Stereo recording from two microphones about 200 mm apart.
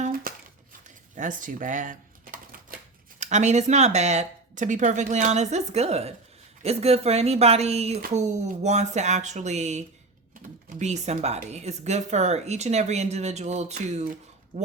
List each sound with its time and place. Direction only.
0.0 s a sound: 45° right (ahead or behind)
0.9 s typewriter: 40° right (ahead or behind)
3.2 s speech: 35° right (ahead or behind)